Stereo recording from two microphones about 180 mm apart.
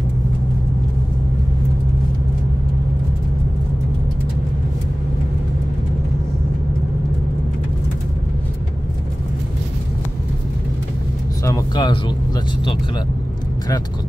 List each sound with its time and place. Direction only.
11.4 s music: 20° left (ahead or behind)